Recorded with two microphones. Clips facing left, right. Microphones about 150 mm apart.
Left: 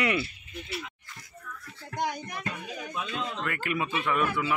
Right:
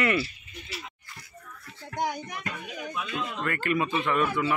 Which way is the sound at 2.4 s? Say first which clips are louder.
Even; 30° left (ahead or behind).